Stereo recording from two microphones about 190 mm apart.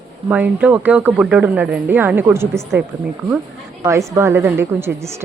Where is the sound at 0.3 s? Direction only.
5° right (ahead or behind).